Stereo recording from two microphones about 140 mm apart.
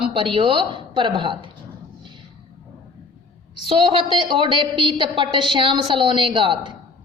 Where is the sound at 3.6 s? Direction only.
40° right (ahead or behind).